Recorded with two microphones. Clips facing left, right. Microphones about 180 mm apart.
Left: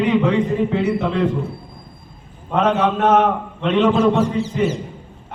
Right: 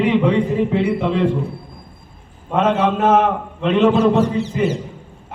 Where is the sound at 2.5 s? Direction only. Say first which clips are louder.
Right 1 dB; 5° right (ahead or behind).